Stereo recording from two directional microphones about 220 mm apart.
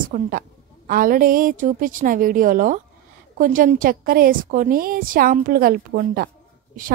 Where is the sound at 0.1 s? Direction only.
40° right (ahead or behind).